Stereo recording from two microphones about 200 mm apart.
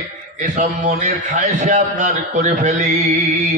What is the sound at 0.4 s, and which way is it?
A man's voice, 40° right (ahead or behind).